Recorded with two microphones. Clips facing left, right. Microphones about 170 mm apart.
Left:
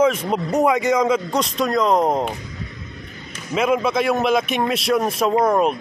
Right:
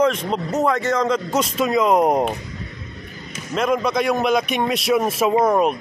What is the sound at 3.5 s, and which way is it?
A man's voice, 5° left (ahead or behind).